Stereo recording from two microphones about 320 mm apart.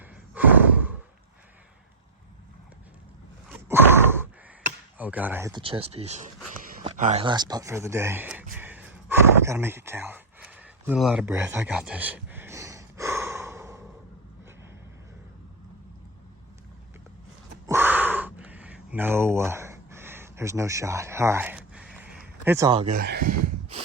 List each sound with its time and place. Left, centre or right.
0.3 s sigh: centre
3.5 s sigh: centre
4.9 s speech: centre
8.5 s gasp: centre
17.7 s a sound: centre; by 23.3 s right
23.3 s a sound: right